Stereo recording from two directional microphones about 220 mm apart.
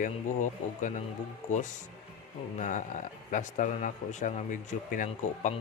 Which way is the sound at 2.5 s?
35° left (ahead or behind).